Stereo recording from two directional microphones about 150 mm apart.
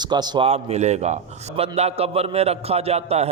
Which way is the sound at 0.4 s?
45° right (ahead or behind).